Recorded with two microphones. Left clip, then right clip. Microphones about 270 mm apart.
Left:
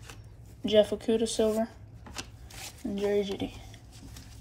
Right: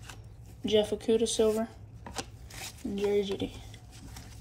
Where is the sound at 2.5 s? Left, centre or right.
Centre.